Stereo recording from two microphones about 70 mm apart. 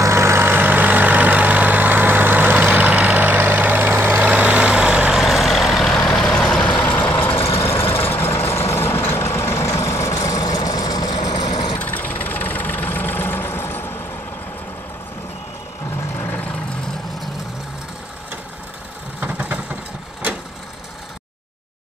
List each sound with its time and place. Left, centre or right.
0.0 s vehicle: right
4.2 s vehicle: right
5.2 s vehicle: centre; by 7.1 s left
7.2 s vehicle: left
11.8 s vehicle: left
16.2 s vehicle: left
19.1 s vehicle: right